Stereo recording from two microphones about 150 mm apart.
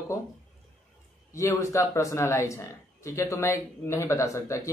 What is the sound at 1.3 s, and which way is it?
Speech, 20° left (ahead or behind).